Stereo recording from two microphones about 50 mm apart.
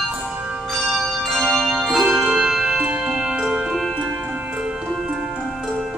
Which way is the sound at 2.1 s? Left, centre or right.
Centre.